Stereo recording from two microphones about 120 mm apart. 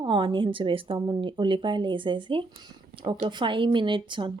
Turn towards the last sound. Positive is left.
turn(degrees=-40)  # may be behind; listen again after turning